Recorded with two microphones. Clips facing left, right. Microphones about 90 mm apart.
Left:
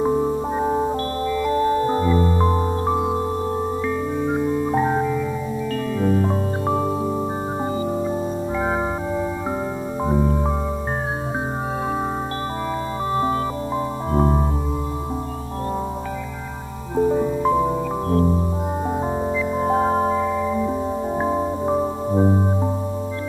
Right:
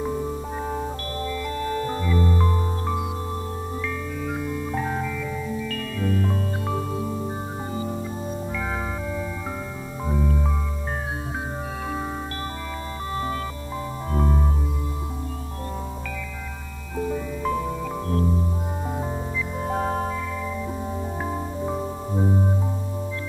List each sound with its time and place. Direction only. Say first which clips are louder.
0.0 s music: left 8 dB; 35° left (ahead or behind)
10.0 s music: left 5 dB; 30° left (ahead or behind)
13.1 s music: left 7 dB; 30° left (ahead or behind)
16.9 s music: left 9 dB; 30° left (ahead or behind)
19.6 s music: left 6 dB; 30° left (ahead or behind)